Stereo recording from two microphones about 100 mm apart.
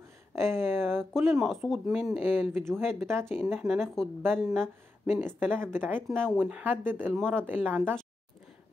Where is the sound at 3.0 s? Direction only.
25° right (ahead or behind).